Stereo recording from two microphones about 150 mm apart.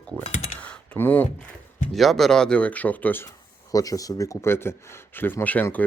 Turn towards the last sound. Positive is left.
turn(degrees=10)  # may be behind; listen again after turning